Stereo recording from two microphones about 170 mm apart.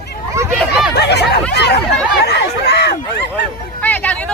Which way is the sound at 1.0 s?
80° left.